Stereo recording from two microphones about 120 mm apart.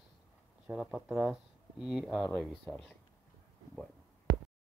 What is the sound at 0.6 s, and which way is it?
Speech, 5° right (ahead or behind).